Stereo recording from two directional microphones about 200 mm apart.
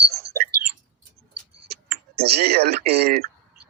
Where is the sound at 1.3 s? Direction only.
55° right (ahead or behind).